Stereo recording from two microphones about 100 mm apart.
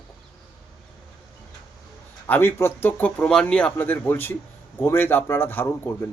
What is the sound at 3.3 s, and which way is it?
Speech, 10° left (ahead or behind).